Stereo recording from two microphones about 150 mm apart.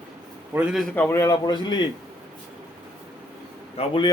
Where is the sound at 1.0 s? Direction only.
15° left (ahead or behind).